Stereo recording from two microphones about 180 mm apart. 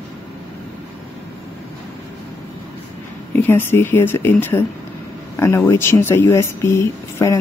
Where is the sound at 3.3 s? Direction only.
10° left (ahead or behind).